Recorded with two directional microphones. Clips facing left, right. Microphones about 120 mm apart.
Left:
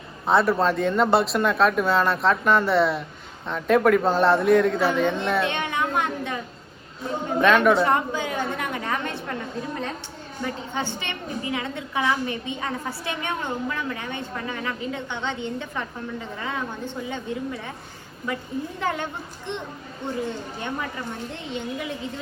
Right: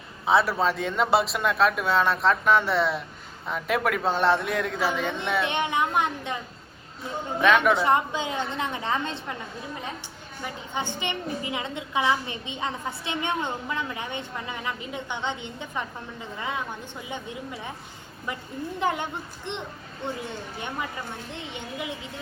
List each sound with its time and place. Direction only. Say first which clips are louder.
0.3 s speech: left 2 dB; centre (ahead or behind)
5.5 s a sound: even; 20° right (ahead or behind)
7.4 s speech: left 2 dB; centre (ahead or behind)
7.7 s a woman's voice: left 2 dB; 20° right (ahead or behind)